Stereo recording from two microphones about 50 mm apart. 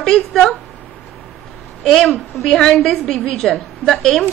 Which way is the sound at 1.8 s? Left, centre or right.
Centre.